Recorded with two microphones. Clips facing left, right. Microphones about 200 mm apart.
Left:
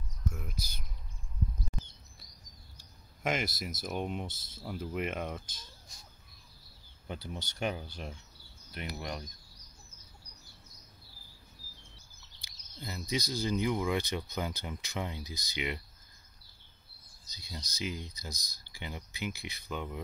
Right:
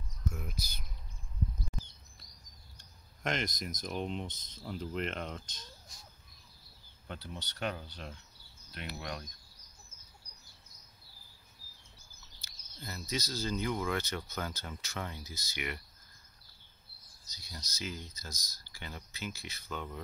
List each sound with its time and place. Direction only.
2.8 s speech: 5° left (ahead or behind)
7.1 s speech: 10° left (ahead or behind)
12.4 s speech: 15° left (ahead or behind)
17.3 s speech: 15° left (ahead or behind)